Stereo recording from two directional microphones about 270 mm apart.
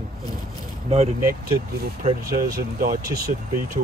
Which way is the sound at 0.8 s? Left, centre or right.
Right.